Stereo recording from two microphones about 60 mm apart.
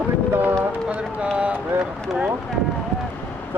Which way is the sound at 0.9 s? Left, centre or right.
Right.